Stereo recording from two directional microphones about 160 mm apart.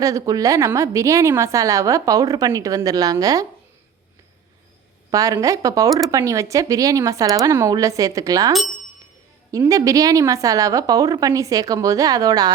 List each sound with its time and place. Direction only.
0.0 s a woman's voice: 20° right (ahead or behind)
5.1 s a woman's voice: 20° right (ahead or behind)